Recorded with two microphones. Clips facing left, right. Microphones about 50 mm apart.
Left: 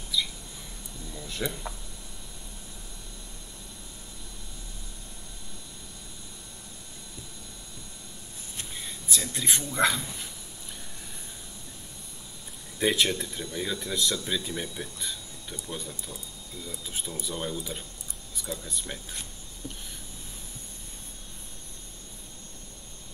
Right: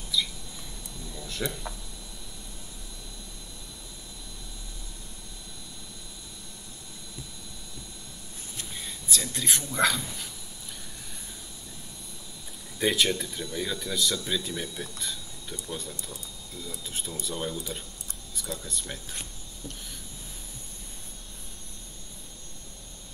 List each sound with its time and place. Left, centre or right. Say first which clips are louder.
1.3 s speech: even; centre
8.7 s speech: even; centre
12.7 s speech: even; centre